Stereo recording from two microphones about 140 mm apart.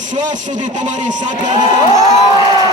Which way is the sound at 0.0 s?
60° right (ahead or behind).